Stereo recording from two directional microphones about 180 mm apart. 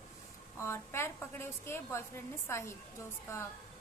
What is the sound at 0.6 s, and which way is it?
A woman's voice, 15° left (ahead or behind).